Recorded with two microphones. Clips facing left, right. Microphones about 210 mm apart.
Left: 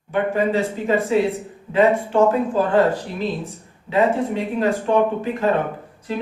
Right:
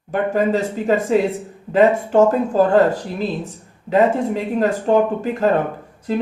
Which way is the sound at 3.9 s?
40° right (ahead or behind).